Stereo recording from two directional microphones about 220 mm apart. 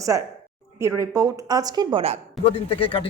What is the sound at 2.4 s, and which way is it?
Speech, 25° left (ahead or behind).